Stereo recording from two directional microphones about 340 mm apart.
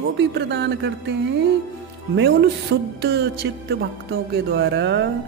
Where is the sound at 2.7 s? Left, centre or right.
Right.